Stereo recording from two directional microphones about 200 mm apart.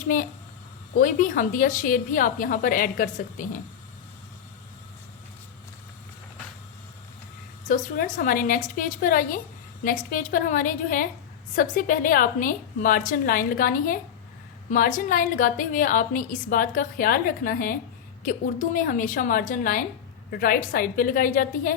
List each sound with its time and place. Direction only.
0.9 s a woman's voice: 40° left (ahead or behind)
7.9 s a woman's voice: 40° left (ahead or behind)